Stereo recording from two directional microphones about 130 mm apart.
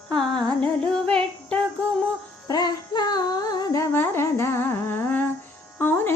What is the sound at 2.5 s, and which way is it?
Music, 30° left (ahead or behind).